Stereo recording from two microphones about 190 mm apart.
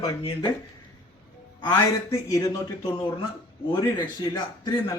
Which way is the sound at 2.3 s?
15° left (ahead or behind).